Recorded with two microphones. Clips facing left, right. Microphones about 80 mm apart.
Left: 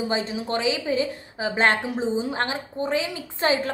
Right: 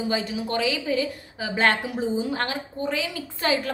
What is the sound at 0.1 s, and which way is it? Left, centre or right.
A woman's voice, left.